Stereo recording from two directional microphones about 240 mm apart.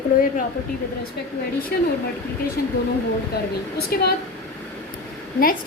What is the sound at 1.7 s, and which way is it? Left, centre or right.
Speech, left.